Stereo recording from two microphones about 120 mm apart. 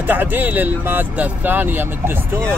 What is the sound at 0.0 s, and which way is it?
Speech, 15° right (ahead or behind).